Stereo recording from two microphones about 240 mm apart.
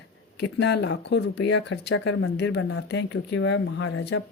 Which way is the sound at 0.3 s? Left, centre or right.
Left.